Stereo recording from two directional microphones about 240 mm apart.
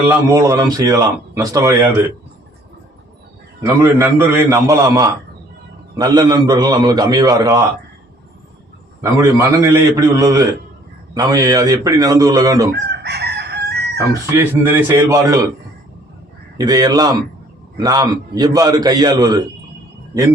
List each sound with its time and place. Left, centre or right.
0.3 s speech: centre
3.8 s speech: centre
9.4 s speech: centre
12.7 s chicken: right
14.3 s speech: centre
16.6 s speech: centre